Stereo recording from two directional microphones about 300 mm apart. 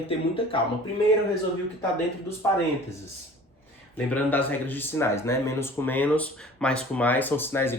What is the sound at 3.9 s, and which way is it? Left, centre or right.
Speech, centre.